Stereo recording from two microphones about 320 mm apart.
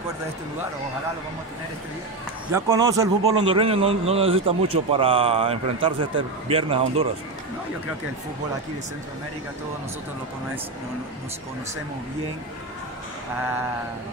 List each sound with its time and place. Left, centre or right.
2.5 s a man's voice: centre